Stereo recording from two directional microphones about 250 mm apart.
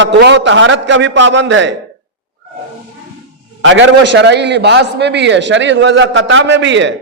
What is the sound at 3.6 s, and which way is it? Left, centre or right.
A man's voice, right.